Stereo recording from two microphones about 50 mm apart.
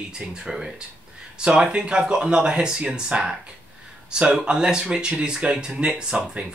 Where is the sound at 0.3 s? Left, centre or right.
Centre.